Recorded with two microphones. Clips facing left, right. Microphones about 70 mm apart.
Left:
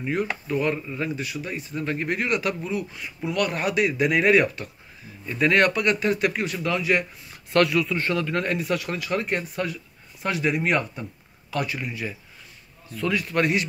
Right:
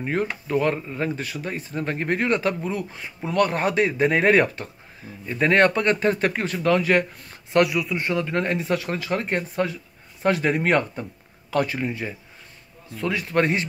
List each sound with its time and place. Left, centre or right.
0.0 s speech: right
7.5 s speech: centre
8.1 s speech: right